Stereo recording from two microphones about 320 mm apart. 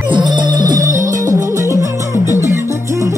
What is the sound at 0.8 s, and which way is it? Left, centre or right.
Music, right.